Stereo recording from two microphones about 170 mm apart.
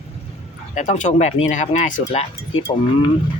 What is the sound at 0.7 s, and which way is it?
Speech, 45° left (ahead or behind).